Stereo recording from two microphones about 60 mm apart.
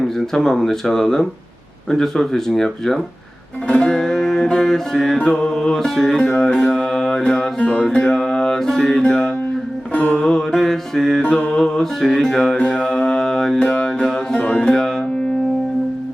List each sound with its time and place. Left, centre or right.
0.0 s speech: centre
3.7 s music: centre
12.5 s mantra: centre
13.6 s music: centre